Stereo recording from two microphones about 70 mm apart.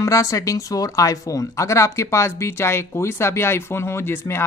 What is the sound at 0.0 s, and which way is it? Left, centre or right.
Speech, left.